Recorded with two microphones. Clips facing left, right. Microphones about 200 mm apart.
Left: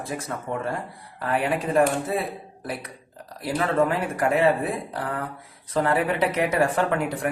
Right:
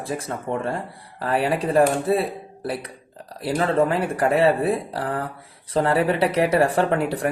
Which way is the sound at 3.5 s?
30° right (ahead or behind).